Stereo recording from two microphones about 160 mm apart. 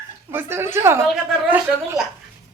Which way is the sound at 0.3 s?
15° right (ahead or behind).